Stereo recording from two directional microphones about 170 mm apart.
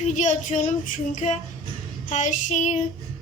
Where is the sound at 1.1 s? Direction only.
40° left (ahead or behind).